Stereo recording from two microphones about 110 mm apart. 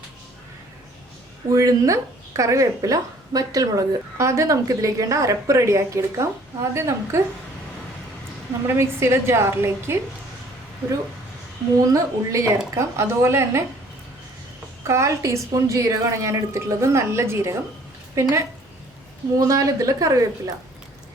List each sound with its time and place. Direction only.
1.5 s speech: 30° right (ahead or behind)
8.6 s speech: 25° right (ahead or behind)
11.9 s speech: 30° right (ahead or behind)
14.8 s speech: 25° right (ahead or behind)